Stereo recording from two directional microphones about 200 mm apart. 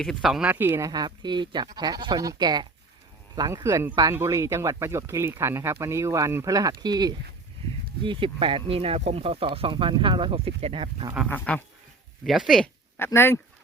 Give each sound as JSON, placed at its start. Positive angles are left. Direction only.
{"t": 0.0, "sound": "speech", "side_deg": 0}
{"t": 11.3, "sound": "speech", "side_deg": 5}
{"t": 13.0, "sound": "speech", "side_deg": 10}